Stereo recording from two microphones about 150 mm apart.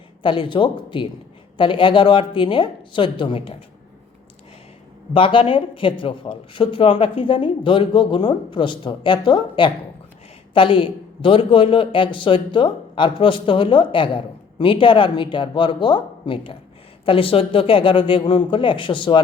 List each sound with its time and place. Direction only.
0.2 s a man's voice: 35° left (ahead or behind)
5.1 s a man's voice: 35° left (ahead or behind)